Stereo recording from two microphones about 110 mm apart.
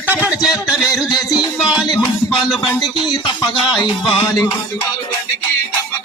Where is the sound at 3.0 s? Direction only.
45° left (ahead or behind).